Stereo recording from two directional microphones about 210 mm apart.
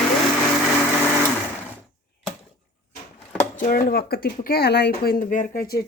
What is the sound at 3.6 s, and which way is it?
Speech, 40° left (ahead or behind).